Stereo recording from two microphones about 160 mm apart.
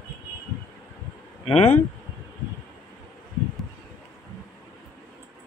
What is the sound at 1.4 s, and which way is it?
Speech, 35° left (ahead or behind).